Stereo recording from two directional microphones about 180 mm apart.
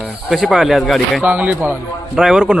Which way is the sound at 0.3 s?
Centre (ahead or behind).